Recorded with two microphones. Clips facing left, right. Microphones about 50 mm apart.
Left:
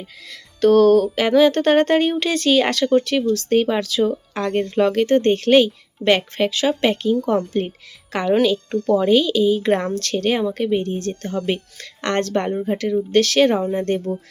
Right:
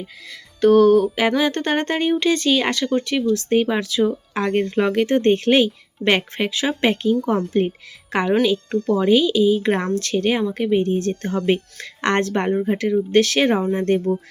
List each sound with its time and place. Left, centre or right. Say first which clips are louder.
0.0 s speech: right 2 dB; centre
4.4 s speech: even; centre
10.8 s speech: right 3 dB; right
13.7 s speech: right 2 dB; centre